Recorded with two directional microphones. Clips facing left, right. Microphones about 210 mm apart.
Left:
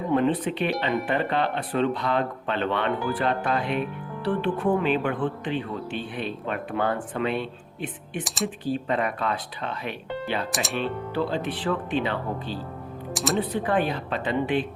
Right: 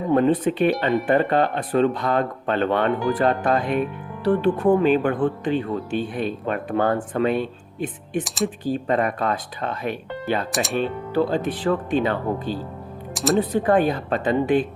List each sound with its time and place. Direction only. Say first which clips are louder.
0.1 s speech: right 5 dB; 45° right (ahead or behind)
10.5 s speech: right 5 dB; centre (ahead or behind)
10.8 s speech: right 5 dB; 45° right (ahead or behind)
13.1 s speech: right 6 dB; centre (ahead or behind)
13.5 s speech: right 6 dB; 45° right (ahead or behind)